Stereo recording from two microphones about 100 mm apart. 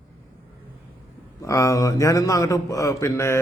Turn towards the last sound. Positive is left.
turn(degrees=30)  # may be behind; listen again after turning